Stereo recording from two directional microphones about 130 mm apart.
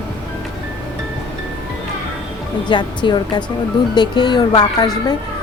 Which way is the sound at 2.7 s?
35° left (ahead or behind).